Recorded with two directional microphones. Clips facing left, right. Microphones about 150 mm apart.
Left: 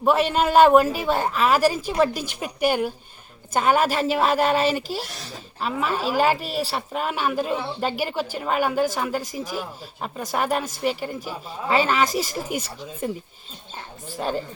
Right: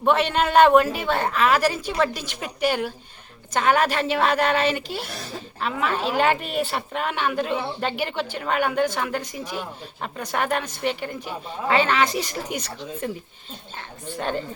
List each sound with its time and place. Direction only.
0.0 s a woman's voice: 5° left (ahead or behind)
4.7 s speech: 40° left (ahead or behind)
5.5 s a woman's voice: 5° left (ahead or behind)
14.2 s a woman's voice: 5° left (ahead or behind)